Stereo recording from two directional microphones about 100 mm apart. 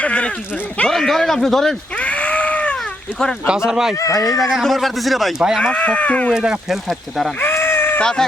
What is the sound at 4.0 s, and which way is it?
Speech, 35° left (ahead or behind).